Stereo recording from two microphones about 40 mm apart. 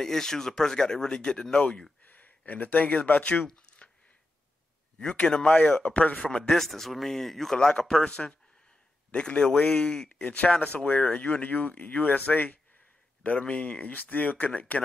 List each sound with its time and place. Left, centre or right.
0.0 s speech: centre
2.0 s speech: left
3.8 s a sound: left
4.9 s a man's voice: left
5.9 s speech: left
6.3 s speech: centre
7.5 s speech: centre
10.1 s speech: left